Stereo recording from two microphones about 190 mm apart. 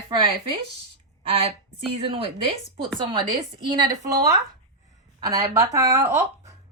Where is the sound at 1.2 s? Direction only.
30° right (ahead or behind).